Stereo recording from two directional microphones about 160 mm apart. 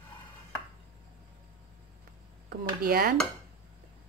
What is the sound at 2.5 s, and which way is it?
Speech, 70° right (ahead or behind).